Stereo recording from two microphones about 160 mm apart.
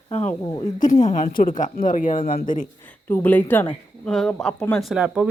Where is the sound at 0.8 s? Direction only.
50° left (ahead or behind).